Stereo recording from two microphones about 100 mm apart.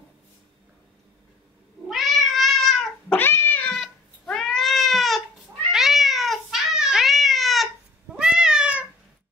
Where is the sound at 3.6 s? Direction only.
5° left (ahead or behind).